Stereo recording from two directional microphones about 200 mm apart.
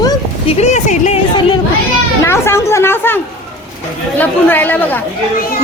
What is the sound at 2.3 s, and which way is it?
A woman's voice, 15° left (ahead or behind).